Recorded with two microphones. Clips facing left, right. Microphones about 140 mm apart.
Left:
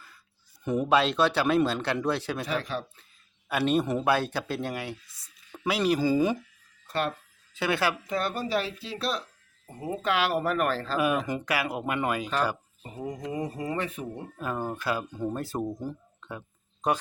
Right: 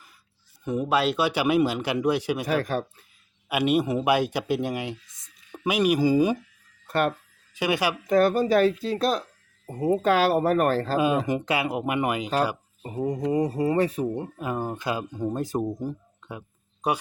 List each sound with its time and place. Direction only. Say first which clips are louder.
0.6 s speech: even; centre (ahead or behind)
2.5 s speech: right 6 dB; 50° right (ahead or behind)
3.5 s speech: right 2 dB; 10° right (ahead or behind)
6.8 s a sound: right 5 dB; 55° right (ahead or behind)
7.5 s speech: right 2 dB; 15° right (ahead or behind)
8.0 s speech: right 10 dB; 45° right (ahead or behind)
10.9 s speech: right 4 dB; 25° right (ahead or behind)
13.0 s speech: right 8 dB; 35° right (ahead or behind)
14.3 s speech: right 2 dB; 15° right (ahead or behind)